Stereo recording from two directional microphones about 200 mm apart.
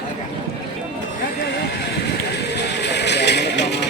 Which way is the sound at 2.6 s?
60° left (ahead or behind).